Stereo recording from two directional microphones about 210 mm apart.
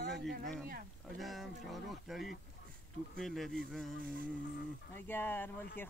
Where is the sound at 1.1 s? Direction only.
Centre (ahead or behind).